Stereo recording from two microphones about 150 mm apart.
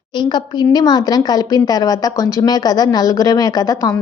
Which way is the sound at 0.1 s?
30° left (ahead or behind).